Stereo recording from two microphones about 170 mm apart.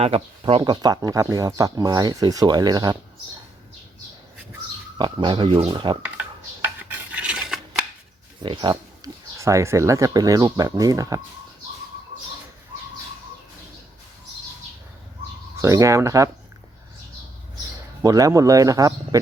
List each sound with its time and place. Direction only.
0.0 s speech: 35° right (ahead or behind)
4.9 s speech: 30° right (ahead or behind)
6.0 s cutlery: 10° right (ahead or behind)
8.7 s speech: 35° right (ahead or behind)
9.0 s speech: 20° right (ahead or behind)
15.5 s speech: 20° right (ahead or behind)
18.0 s speech: 20° right (ahead or behind)